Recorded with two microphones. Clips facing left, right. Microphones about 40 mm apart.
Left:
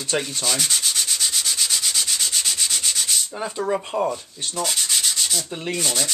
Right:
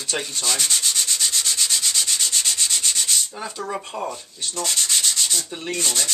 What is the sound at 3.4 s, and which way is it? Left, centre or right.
Speech, centre.